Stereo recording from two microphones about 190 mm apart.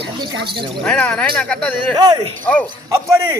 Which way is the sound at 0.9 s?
5° left (ahead or behind).